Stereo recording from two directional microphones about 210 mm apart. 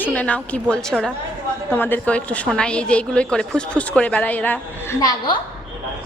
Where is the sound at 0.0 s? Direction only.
5° left (ahead or behind).